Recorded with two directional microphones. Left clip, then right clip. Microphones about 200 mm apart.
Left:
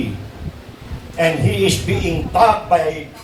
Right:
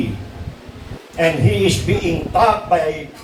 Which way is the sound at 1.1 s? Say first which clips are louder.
Even; 45° left (ahead or behind).